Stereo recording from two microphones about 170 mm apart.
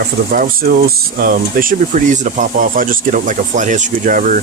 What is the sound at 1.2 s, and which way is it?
Speech, 55° right (ahead or behind).